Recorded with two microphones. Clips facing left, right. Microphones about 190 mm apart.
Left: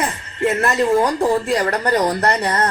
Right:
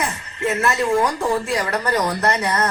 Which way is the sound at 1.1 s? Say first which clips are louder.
Left 4 dB; 35° left (ahead or behind).